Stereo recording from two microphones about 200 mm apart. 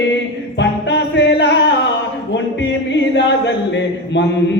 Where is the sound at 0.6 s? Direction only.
60° left (ahead or behind).